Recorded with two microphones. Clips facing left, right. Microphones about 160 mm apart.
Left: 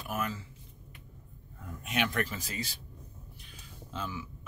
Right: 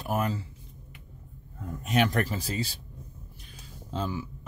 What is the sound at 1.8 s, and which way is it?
Speech, 40° right (ahead or behind).